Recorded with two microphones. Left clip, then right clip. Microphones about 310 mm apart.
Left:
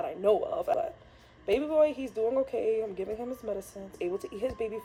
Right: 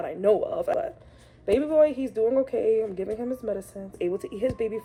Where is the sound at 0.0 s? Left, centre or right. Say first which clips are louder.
Right 4 dB; right.